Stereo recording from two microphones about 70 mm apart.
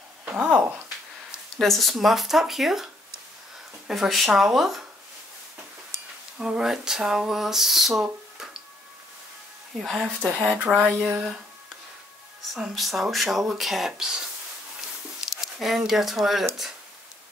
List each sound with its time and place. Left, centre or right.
0.4 s a sound: right
1.6 s speech: centre
6.4 s speech: centre
9.8 s speech: centre
10.2 s speech: right
11.0 s speech: centre
12.5 s speech: centre
15.1 s a sound: centre
15.9 s speech: centre